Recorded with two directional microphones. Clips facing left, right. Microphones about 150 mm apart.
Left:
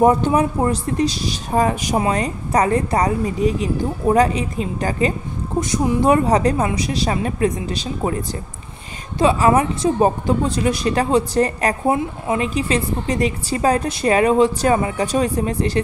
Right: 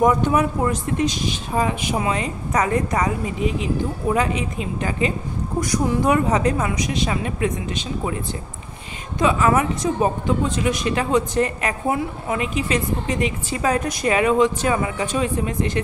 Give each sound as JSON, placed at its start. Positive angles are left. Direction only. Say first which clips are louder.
{"t": 0.0, "sound": "speech", "louder": "left 3 dB", "side_deg": 30}
{"t": 5.6, "sound": "speech", "louder": "left 3 dB", "side_deg": 25}
{"t": 9.2, "sound": "speech", "louder": "left 3 dB", "side_deg": 30}